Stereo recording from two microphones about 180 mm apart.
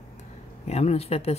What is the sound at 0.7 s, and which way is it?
Speech, 35° left (ahead or behind).